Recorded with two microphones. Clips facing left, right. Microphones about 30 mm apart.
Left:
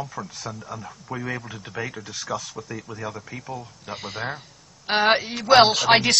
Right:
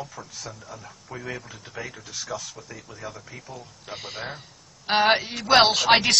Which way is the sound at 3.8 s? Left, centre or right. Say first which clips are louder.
Left 3 dB; centre.